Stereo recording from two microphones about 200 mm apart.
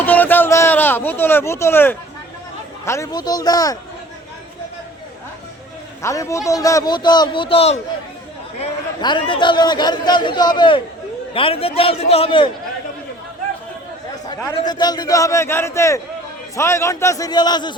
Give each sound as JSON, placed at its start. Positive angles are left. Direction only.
{"t": 0.0, "sound": "a sound", "side_deg": 10}
{"t": 2.8, "sound": "a man's voice", "side_deg": 15}
{"t": 6.0, "sound": "a man's voice", "side_deg": 15}
{"t": 14.3, "sound": "a man's voice", "side_deg": 20}